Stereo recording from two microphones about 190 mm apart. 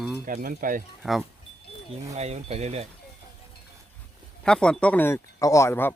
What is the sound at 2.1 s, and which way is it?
Speech, 35° right (ahead or behind).